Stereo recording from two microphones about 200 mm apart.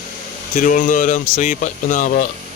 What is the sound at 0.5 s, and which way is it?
A man's voice, 40° left (ahead or behind).